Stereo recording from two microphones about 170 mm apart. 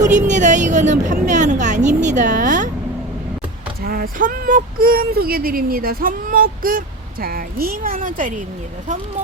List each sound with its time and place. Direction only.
0.0 s a woman's voice: 45° right (ahead or behind)
3.8 s speech: 60° right (ahead or behind)